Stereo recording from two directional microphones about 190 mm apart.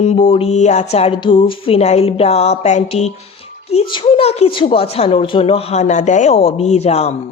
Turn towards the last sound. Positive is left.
turn(degrees=35)  # may be behind; listen again after turning